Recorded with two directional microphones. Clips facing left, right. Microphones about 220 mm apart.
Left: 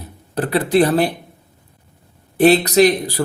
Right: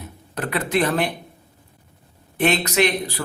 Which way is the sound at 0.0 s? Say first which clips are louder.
Left 6 dB; 35° left (ahead or behind).